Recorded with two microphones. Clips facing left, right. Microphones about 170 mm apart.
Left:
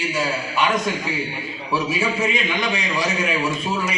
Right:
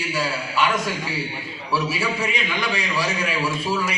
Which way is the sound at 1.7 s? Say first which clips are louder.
Left 2 dB; 20° left (ahead or behind).